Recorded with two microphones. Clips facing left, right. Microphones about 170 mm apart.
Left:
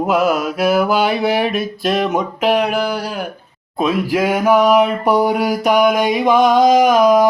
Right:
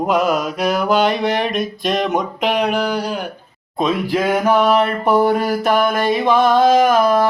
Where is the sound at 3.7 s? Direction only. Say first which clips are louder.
Left 1 dB; 5° left (ahead or behind).